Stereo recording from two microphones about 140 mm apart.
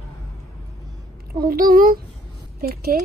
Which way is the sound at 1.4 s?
90° right.